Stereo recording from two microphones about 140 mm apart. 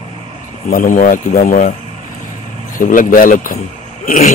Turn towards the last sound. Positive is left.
turn(degrees=65)  # may be behind; listen again after turning